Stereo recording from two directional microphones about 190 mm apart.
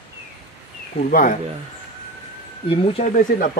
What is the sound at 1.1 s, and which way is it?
Speech, 45° left (ahead or behind).